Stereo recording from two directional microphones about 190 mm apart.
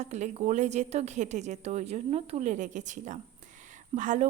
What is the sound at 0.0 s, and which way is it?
A woman's voice, 35° right (ahead or behind).